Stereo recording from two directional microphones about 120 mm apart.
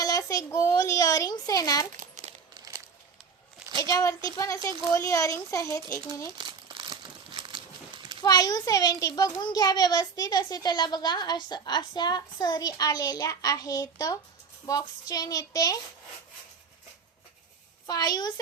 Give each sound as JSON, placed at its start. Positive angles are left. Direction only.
{"t": 0.0, "sound": "a sound", "side_deg": 30}
{"t": 2.0, "sound": "crumpling", "side_deg": -85}
{"t": 3.8, "sound": "a child's voice", "side_deg": 30}
{"t": 6.4, "sound": "crumpling", "side_deg": -40}
{"t": 8.2, "sound": "a child's voice", "side_deg": 30}
{"t": 17.8, "sound": "a child's voice", "side_deg": 35}